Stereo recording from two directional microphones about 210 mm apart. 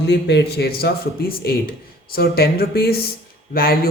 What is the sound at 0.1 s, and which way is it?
Speech, 55° left (ahead or behind).